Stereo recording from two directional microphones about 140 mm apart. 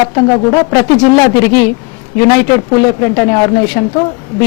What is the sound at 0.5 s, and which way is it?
A man's voice, 20° left (ahead or behind).